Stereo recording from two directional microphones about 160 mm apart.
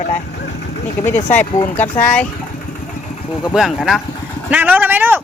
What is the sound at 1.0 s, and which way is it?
Speech, 10° left (ahead or behind).